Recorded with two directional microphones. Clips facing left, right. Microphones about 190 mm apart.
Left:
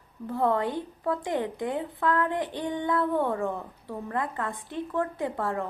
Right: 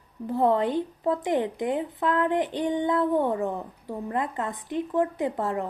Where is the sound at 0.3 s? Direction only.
20° right (ahead or behind).